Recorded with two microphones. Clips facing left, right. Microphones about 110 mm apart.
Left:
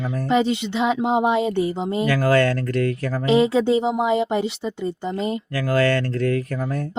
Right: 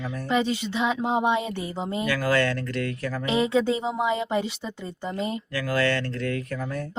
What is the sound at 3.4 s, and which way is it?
Speech, 30° left (ahead or behind).